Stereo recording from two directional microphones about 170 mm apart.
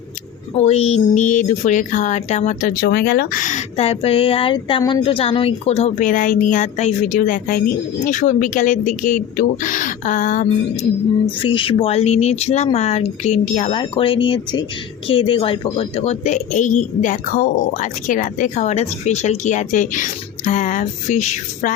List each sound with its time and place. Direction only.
0.5 s a woman's voice: 40° left (ahead or behind)
11.4 s a woman's voice: 30° left (ahead or behind)